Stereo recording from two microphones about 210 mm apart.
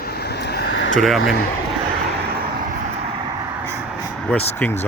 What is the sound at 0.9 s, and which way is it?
Speech, centre (ahead or behind).